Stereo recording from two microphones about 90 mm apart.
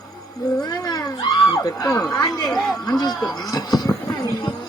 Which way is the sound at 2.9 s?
50° left (ahead or behind).